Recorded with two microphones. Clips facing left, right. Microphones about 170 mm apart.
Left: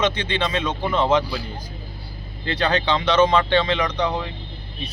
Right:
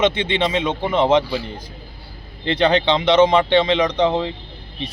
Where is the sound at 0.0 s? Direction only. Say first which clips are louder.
Right 4 dB; 25° right (ahead or behind).